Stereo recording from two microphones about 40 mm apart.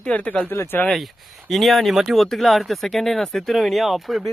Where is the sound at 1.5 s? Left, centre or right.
Centre.